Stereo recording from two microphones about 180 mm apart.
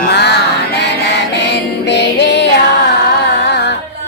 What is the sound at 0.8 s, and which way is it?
Music, 75° left (ahead or behind).